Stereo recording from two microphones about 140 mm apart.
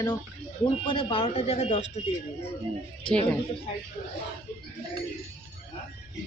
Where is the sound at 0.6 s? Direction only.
35° left (ahead or behind); by 1.9 s 55° left (ahead or behind).